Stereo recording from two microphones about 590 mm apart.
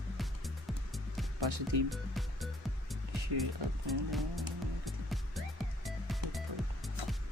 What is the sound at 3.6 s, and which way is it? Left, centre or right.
Speech, right.